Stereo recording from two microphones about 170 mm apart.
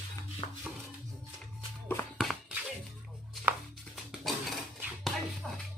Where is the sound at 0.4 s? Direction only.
30° left (ahead or behind).